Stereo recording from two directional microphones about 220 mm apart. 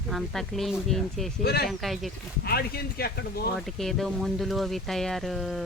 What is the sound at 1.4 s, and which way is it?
Speech, 45° left (ahead or behind).